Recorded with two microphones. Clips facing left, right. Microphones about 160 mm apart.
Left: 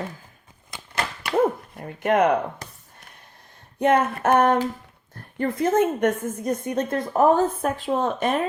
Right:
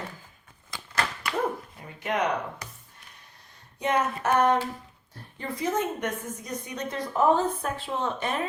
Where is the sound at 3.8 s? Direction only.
55° left (ahead or behind).